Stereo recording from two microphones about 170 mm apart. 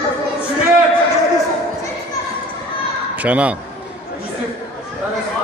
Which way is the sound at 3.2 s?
10° right (ahead or behind).